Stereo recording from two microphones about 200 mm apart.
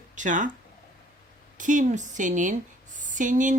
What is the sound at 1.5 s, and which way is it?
Speech, 40° right (ahead or behind).